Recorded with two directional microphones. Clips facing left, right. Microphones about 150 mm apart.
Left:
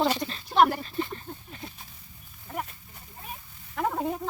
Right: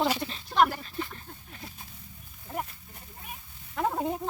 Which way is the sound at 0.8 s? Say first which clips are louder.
Left 5 dB; centre (ahead or behind).